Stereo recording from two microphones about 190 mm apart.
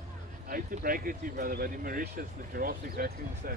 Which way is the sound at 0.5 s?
50° right (ahead or behind).